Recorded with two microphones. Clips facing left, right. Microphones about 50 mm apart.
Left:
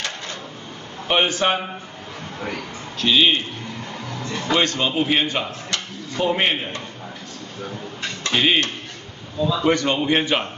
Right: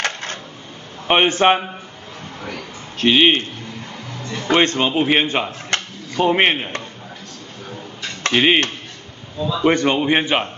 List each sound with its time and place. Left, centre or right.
0.0 s a sound: right
1.0 s a man's voice: right
3.0 s a man's voice: right
4.2 s speech: centre
4.5 s a man's voice: right
5.7 s a sound: right
8.3 s speech: right
9.7 s a man's voice: right